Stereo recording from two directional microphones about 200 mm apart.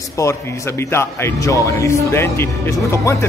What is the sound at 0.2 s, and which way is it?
Speech, 15° left (ahead or behind).